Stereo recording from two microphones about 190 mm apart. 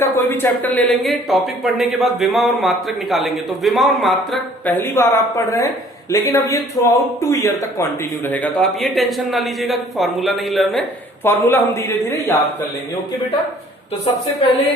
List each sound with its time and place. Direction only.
0.0 s a woman's voice: 10° left (ahead or behind)
4.7 s a woman's voice: 10° left (ahead or behind)
11.2 s speech: 10° left (ahead or behind)